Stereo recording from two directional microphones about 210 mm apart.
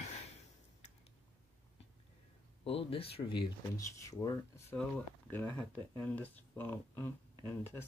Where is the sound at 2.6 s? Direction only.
25° left (ahead or behind).